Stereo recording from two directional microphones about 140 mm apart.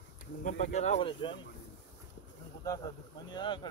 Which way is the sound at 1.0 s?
35° left (ahead or behind).